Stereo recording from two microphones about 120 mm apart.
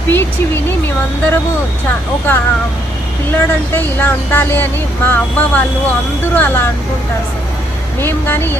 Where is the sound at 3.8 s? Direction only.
15° left (ahead or behind).